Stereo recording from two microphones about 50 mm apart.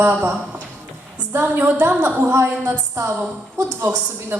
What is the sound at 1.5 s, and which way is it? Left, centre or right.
Speech, right.